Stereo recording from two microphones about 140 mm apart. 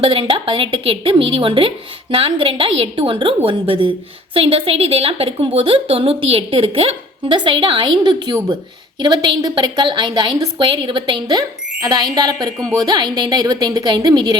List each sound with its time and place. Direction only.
0.0 s a woman's voice: 40° right (ahead or behind)